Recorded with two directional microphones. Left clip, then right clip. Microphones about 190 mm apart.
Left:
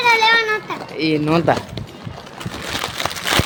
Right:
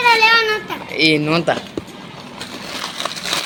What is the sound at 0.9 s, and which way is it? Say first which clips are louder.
Speech: right 6 dB; 20° left (ahead or behind).